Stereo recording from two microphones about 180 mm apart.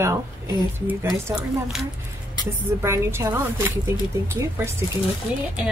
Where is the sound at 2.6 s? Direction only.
15° right (ahead or behind).